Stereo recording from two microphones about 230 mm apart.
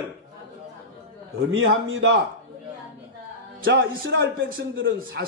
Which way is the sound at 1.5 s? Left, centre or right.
Right.